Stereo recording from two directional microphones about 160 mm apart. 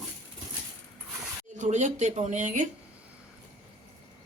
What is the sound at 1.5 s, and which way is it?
Speech, 50° right (ahead or behind).